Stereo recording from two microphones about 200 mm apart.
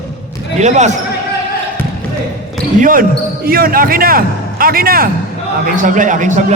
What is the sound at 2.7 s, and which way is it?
A man's voice, 45° right (ahead or behind).